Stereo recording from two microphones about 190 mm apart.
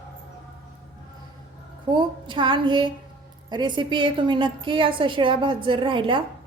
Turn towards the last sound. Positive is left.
turn(degrees=-25)  # may be behind; listen again after turning